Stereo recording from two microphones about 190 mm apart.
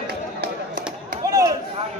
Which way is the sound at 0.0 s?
50° right (ahead or behind).